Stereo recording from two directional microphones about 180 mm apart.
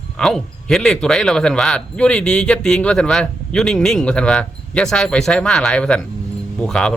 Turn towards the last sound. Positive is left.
turn(degrees=5)  # may be behind; listen again after turning